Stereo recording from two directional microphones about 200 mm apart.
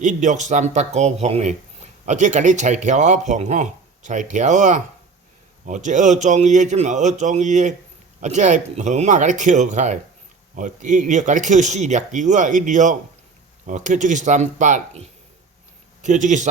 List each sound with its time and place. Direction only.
0.0 s a man's voice: 40° right (ahead or behind)